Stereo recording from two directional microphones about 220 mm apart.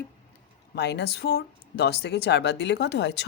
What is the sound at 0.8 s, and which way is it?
Speech, 50° left (ahead or behind).